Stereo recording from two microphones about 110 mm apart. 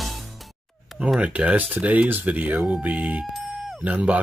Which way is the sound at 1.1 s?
10° right (ahead or behind).